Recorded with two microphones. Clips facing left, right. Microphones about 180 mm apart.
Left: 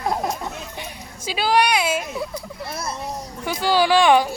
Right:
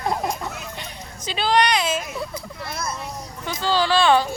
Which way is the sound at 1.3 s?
5° left (ahead or behind).